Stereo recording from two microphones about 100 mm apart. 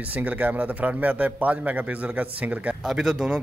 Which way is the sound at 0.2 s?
15° right (ahead or behind).